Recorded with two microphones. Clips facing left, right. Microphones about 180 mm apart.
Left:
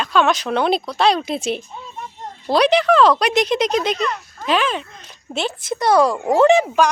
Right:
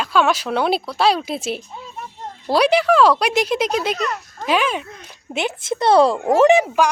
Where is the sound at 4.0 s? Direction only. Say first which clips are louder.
Left 1 dB; 45° right (ahead or behind).